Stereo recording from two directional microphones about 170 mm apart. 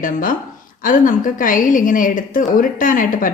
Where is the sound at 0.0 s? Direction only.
55° left (ahead or behind).